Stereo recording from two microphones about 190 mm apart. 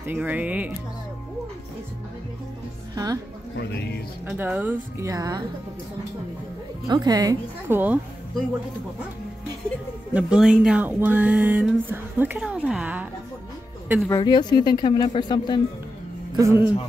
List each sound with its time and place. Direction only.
0.0 s speech: 10° right (ahead or behind)
2.9 s a woman's voice: 20° right (ahead or behind)
3.5 s speech: 60° left (ahead or behind)
4.3 s a woman's voice: 5° right (ahead or behind)
6.9 s a woman's voice: 20° right (ahead or behind)
10.1 s speech: 5° right (ahead or behind)
14.0 s speech: 20° left (ahead or behind)
16.3 s speech: 15° right (ahead or behind)